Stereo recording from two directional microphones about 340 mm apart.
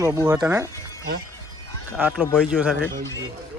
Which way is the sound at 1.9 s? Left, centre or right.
Centre.